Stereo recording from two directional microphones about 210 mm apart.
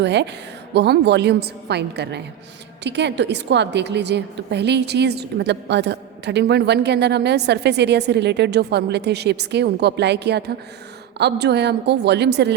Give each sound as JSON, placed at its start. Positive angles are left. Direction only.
{"t": 0.0, "sound": "a woman's voice", "side_deg": -55}